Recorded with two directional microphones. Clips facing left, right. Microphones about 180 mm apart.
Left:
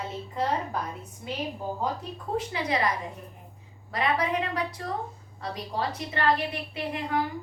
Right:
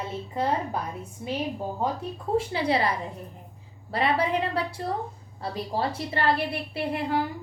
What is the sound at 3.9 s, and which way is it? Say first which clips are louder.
A woman's voice: right 2 dB; 30° right (ahead or behind).